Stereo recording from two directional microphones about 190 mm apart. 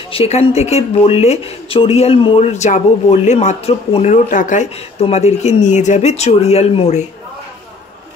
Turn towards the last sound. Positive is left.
turn(degrees=35)  # may be behind; listen again after turning